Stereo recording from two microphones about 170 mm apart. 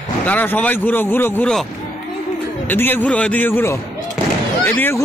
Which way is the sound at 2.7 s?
10° left (ahead or behind).